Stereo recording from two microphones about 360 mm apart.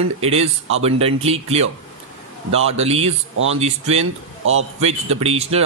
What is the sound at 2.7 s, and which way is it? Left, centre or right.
Speech, centre.